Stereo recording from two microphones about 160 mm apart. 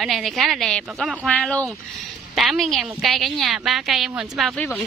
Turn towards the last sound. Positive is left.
turn(degrees=0)  # may be behind; listen again after turning